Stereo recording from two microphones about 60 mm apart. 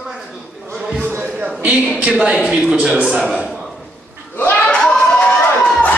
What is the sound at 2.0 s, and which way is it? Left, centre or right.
Speech, centre.